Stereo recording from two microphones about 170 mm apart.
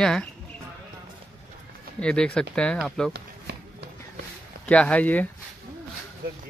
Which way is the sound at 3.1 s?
75° right (ahead or behind).